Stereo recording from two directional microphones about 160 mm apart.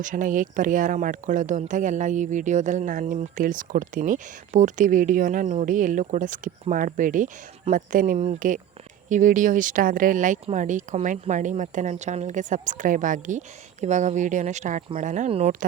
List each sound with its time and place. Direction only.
0.0 s a woman's voice: 55° right (ahead or behind)